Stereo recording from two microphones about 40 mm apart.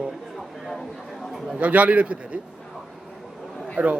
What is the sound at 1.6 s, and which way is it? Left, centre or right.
Speech, right.